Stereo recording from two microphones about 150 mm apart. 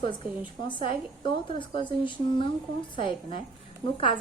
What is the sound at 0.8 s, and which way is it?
A woman's voice, 35° left (ahead or behind).